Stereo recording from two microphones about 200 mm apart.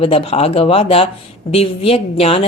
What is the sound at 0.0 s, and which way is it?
Speech, 30° left (ahead or behind).